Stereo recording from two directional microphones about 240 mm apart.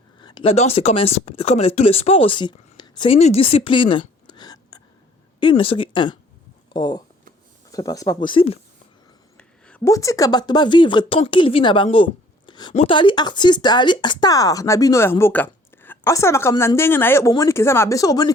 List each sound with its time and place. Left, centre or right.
0.2 s a woman's voice: centre
9.4 s a woman's voice: centre